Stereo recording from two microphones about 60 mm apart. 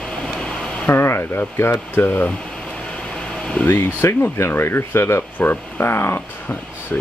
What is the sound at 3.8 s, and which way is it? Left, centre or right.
Speech, left.